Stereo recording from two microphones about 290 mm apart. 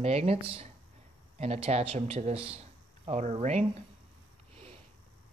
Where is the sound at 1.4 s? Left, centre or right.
Right.